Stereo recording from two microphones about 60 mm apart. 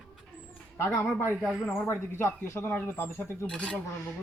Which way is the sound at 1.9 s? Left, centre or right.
Left.